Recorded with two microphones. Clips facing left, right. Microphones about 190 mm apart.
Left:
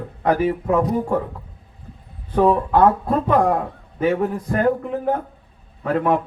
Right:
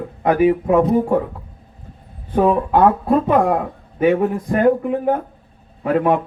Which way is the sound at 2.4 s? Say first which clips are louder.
Right 1 dB; 10° right (ahead or behind).